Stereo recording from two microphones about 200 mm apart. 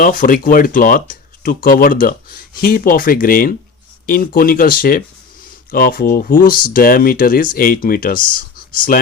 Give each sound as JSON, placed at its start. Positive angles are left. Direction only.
{"t": 0.0, "sound": "speech", "side_deg": 40}